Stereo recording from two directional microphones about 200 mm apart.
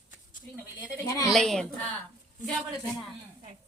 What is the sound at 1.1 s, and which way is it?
Speech, 15° left (ahead or behind).